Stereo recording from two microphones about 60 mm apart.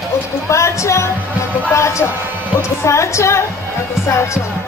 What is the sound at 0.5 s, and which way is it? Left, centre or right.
Speech, left.